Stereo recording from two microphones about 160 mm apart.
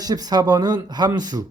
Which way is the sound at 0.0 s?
25° right (ahead or behind).